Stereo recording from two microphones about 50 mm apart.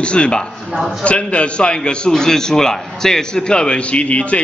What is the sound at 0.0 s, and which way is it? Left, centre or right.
A man's voice, left.